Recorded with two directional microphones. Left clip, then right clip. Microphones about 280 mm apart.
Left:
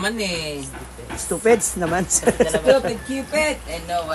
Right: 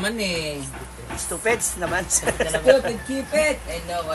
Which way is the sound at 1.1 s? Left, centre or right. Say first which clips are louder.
Left 6 dB; left.